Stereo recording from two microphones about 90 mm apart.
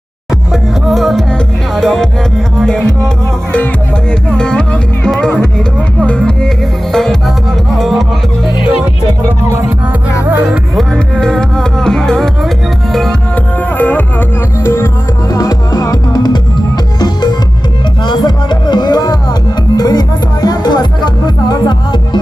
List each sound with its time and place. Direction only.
0.5 s music: centre (ahead or behind)
4.3 s speech: 10° left (ahead or behind)
6.9 s music: 5° left (ahead or behind)
10.2 s music: 15° right (ahead or behind)
10.8 s music: 5° left (ahead or behind)
13.3 s music: 15° left (ahead or behind)
15.3 s music: 40° left (ahead or behind)